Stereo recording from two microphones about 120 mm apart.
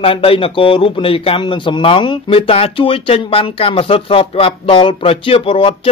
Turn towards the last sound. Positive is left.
turn(degrees=50)  # may be behind; listen again after turning